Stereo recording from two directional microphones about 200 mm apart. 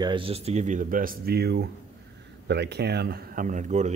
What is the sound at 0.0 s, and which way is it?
Speech, 25° right (ahead or behind).